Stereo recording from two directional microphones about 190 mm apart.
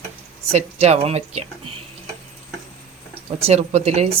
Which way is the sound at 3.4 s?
35° right (ahead or behind).